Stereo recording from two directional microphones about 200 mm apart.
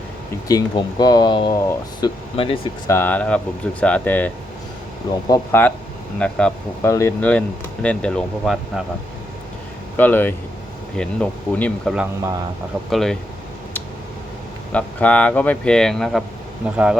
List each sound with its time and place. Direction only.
0.4 s speech: 20° left (ahead or behind)
2.8 s speech: 10° left (ahead or behind)
5.3 s speech: 10° left (ahead or behind)
10.0 s speech: 10° left (ahead or behind)
14.7 s speech: 5° left (ahead or behind)